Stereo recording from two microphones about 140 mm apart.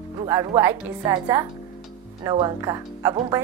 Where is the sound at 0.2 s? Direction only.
25° right (ahead or behind).